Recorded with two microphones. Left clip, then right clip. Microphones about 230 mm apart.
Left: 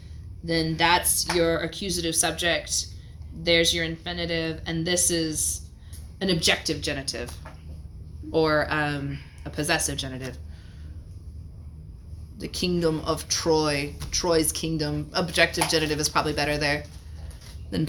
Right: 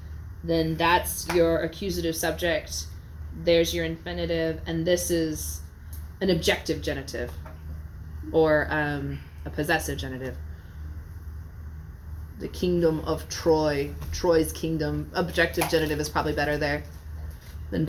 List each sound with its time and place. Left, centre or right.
0.4 s speech: left
8.3 s speech: left
12.4 s speech: left